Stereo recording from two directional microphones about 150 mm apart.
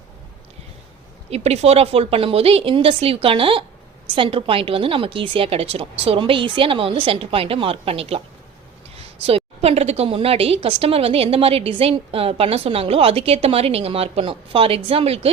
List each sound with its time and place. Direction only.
1.3 s a woman's voice: 45° right (ahead or behind)
9.2 s a woman's voice: 40° right (ahead or behind)